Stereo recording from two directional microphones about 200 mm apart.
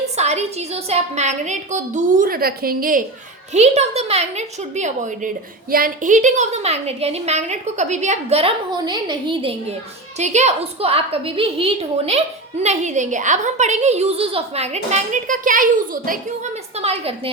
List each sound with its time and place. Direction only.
0.2 s a child's voice: 35° right (ahead or behind)
3.5 s a child's voice: 35° right (ahead or behind)